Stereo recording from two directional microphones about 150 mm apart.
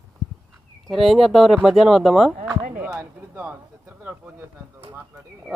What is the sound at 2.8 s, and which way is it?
Speech, 10° right (ahead or behind).